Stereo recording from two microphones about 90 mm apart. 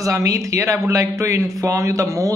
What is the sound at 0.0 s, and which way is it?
A man's voice, 35° right (ahead or behind).